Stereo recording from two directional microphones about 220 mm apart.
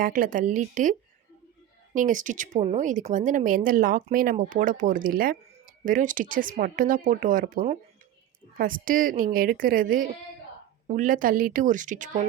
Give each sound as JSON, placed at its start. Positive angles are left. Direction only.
{"t": 0.0, "sound": "speech", "side_deg": -40}